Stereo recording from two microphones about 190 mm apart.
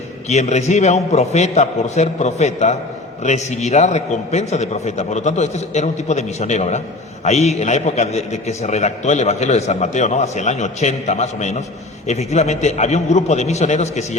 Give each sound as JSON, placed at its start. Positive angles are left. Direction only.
{"t": 0.3, "sound": "a man's voice", "side_deg": 35}